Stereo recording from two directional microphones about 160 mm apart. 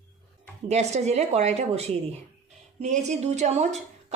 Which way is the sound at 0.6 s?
45° right (ahead or behind).